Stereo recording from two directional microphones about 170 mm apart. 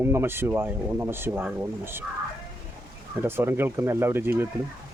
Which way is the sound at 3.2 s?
15° right (ahead or behind).